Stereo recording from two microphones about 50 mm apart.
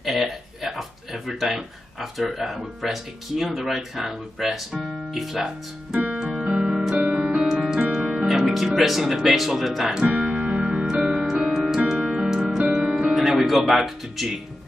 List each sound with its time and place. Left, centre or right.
0.0 s a sound: centre
2.3 s speech: centre
6.3 s music: centre
8.3 s speech: centre
10.0 s keyboard: right
10.9 s music: centre
13.6 s speech: centre